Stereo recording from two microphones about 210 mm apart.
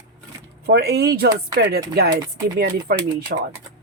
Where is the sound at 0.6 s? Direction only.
50° right (ahead or behind).